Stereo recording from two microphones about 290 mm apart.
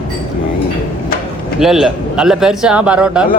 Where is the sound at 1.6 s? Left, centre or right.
Centre.